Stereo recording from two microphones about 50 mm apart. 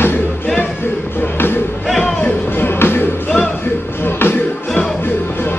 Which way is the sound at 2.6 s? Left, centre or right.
Left.